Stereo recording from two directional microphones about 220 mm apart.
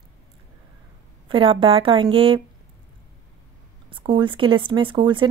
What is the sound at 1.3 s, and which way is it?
Speech, 25° right (ahead or behind).